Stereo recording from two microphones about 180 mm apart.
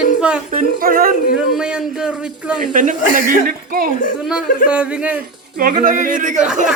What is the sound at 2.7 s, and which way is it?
Speech, 50° right (ahead or behind).